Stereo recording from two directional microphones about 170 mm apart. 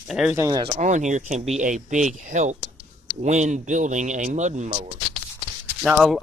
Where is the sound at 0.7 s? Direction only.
45° right (ahead or behind).